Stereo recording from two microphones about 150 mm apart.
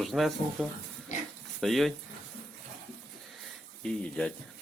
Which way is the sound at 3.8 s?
5° left (ahead or behind).